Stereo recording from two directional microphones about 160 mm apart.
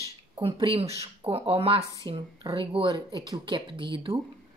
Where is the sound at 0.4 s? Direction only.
35° right (ahead or behind).